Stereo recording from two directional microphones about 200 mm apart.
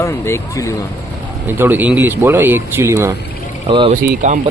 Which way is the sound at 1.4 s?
10° right (ahead or behind).